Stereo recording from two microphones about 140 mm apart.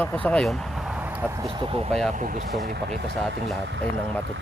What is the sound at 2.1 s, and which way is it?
Speech, 65° right (ahead or behind).